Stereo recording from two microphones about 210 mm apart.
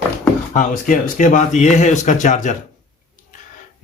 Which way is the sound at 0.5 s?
40° left (ahead or behind).